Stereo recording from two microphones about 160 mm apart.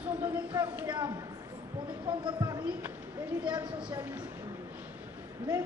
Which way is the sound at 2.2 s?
25° right (ahead or behind).